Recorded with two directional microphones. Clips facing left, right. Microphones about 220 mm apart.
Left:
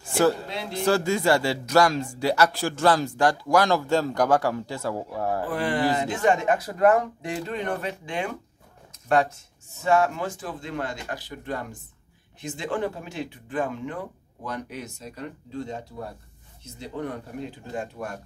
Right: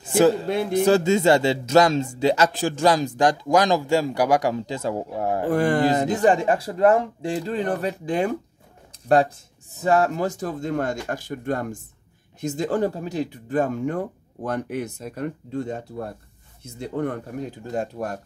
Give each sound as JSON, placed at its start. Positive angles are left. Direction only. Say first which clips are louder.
{"t": 0.0, "sound": "a sound", "louder": "right 4 dB", "side_deg": -20}
{"t": 0.5, "sound": "speech", "louder": "right 10 dB", "side_deg": -50}
{"t": 0.8, "sound": "a man's voice", "louder": "right 3 dB", "side_deg": -20}
{"t": 5.5, "sound": "speech", "louder": "right 7 dB", "side_deg": -45}